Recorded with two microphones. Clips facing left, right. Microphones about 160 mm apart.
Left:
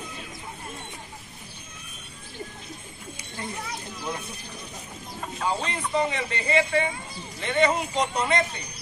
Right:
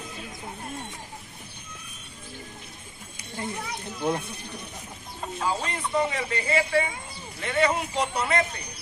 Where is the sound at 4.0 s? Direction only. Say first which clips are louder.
Right 8 dB; 60° right (ahead or behind).